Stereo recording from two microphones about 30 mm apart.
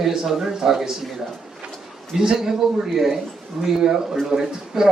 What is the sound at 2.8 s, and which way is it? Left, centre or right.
A man's voice, centre.